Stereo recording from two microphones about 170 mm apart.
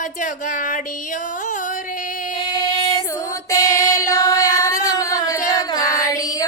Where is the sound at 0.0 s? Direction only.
50° left (ahead or behind).